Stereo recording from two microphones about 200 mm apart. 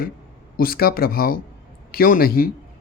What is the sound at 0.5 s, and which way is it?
Speech, 45° left (ahead or behind).